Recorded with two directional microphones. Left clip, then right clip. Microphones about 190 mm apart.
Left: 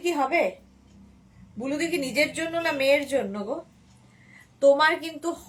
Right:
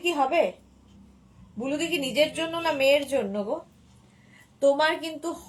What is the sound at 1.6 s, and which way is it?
A woman's voice, 15° left (ahead or behind).